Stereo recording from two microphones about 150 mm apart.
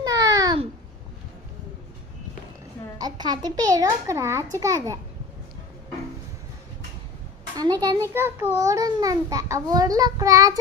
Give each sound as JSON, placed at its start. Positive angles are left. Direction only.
{"t": 0.0, "sound": "a sound", "side_deg": -20}
{"t": 3.0, "sound": "a child's voice", "side_deg": -30}
{"t": 7.5, "sound": "a child's voice", "side_deg": -25}
{"t": 8.1, "sound": "a child's voice", "side_deg": -15}